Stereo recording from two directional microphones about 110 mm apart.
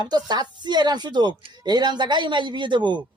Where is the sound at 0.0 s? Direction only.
40° right (ahead or behind).